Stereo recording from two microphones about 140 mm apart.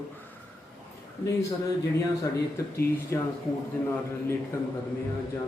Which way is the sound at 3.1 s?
15° left (ahead or behind).